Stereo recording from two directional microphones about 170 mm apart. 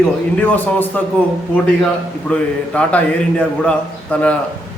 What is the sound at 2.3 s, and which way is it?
A man's voice, 5° left (ahead or behind).